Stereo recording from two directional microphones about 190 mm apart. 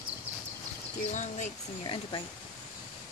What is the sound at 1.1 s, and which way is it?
Speech, 40° left (ahead or behind).